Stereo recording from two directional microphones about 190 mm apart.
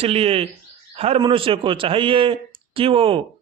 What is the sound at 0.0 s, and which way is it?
A man's voice, 30° right (ahead or behind).